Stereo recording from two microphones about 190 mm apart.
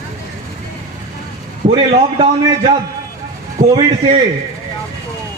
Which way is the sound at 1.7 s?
30° right (ahead or behind).